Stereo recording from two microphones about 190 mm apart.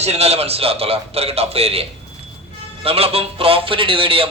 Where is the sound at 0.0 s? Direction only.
35° right (ahead or behind).